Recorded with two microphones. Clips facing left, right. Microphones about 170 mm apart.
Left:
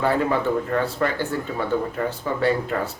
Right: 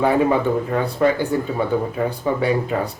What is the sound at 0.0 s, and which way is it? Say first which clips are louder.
Speech: right 4 dB; 15° right (ahead or behind).